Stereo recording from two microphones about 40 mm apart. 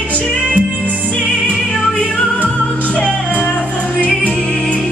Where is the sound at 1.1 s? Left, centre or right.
Left.